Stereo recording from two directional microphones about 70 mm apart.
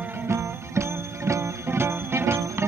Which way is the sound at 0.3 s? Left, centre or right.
Right.